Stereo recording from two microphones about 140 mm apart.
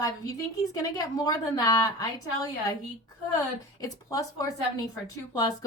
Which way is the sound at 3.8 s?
25° left (ahead or behind).